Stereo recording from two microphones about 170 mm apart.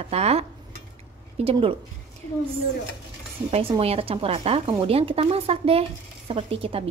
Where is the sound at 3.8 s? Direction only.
35° right (ahead or behind).